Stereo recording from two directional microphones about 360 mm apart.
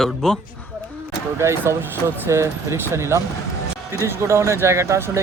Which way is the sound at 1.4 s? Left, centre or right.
Centre.